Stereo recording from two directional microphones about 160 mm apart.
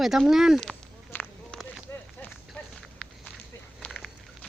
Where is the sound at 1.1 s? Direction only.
5° left (ahead or behind).